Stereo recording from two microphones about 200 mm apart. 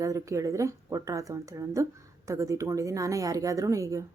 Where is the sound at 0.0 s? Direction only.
15° right (ahead or behind).